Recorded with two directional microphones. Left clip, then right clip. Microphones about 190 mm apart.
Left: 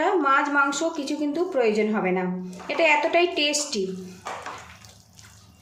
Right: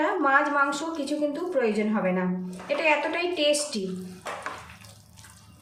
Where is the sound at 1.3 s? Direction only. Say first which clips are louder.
Left 3 dB; 40° left (ahead or behind).